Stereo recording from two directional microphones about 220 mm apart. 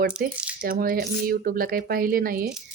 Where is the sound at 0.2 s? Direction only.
40° right (ahead or behind).